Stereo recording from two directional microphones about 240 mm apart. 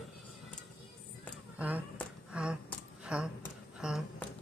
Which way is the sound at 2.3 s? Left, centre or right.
Centre.